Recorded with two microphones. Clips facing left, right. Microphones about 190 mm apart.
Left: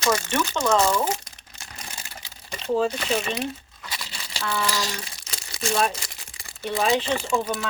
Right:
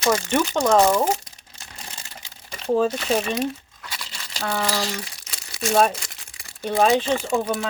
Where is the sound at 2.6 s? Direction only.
50° right (ahead or behind).